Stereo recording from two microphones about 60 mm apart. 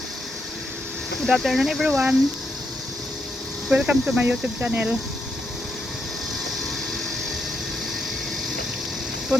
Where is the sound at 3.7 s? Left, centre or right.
Centre.